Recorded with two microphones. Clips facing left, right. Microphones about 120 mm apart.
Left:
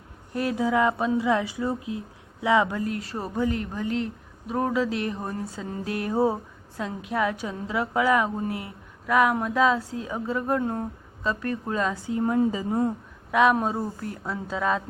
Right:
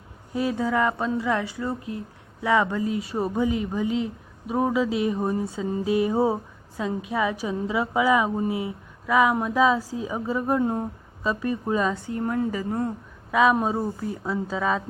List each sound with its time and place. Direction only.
0.3 s a woman's voice: centre (ahead or behind)
0.7 s speech: 15° left (ahead or behind)
2.6 s a woman's voice: centre (ahead or behind)
12.0 s speech: 15° left (ahead or behind)
13.3 s a woman's voice: centre (ahead or behind)